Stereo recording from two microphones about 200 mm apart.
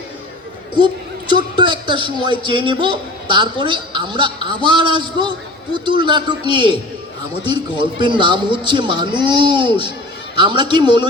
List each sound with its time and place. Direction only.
1.3 s a woman's voice: 25° right (ahead or behind)